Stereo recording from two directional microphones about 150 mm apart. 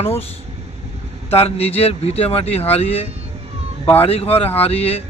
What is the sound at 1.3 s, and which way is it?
Speech, 40° left (ahead or behind).